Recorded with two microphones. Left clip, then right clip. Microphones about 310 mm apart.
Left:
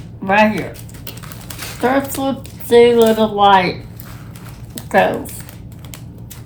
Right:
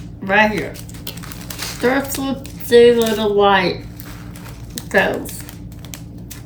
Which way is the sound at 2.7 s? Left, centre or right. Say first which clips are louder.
Left 1 dB; centre.